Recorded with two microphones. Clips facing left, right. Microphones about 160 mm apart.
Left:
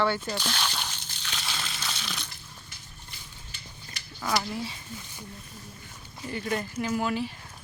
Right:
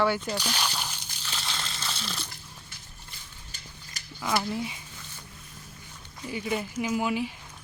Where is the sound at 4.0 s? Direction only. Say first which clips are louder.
Left 1 dB; 40° right (ahead or behind).